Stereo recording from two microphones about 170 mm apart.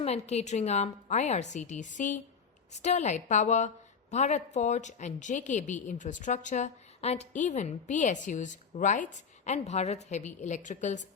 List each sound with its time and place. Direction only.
0.0 s a woman's voice: 40° left (ahead or behind)